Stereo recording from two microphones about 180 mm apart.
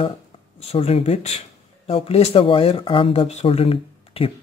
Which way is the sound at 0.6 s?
35° left (ahead or behind).